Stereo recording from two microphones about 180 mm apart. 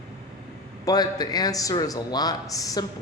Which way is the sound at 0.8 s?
20° left (ahead or behind).